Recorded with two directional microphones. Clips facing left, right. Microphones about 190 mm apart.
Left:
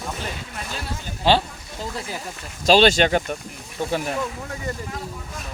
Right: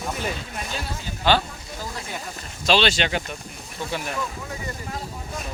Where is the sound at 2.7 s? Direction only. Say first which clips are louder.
Left 6 dB; 45° left (ahead or behind).